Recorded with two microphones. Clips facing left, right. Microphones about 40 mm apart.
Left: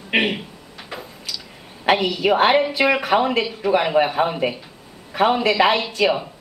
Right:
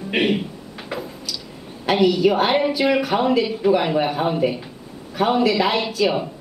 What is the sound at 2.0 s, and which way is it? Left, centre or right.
Speech, centre.